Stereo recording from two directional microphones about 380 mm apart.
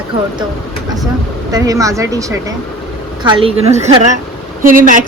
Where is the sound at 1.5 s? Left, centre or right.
Centre.